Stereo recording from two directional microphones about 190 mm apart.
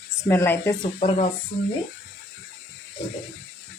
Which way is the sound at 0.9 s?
30° left (ahead or behind).